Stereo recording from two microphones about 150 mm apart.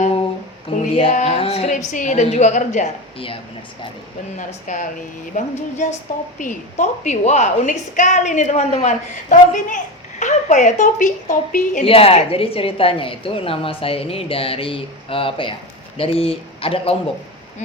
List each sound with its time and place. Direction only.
1.1 s music: 55° left (ahead or behind)
1.4 s music: 45° left (ahead or behind)
1.9 s a woman's voice: 55° left (ahead or behind)
4.4 s a woman's voice: 60° left (ahead or behind)
5.3 s a sound: 50° left (ahead or behind)
6.1 s a woman's voice: 60° left (ahead or behind)
11.8 s a woman's voice: 40° left (ahead or behind)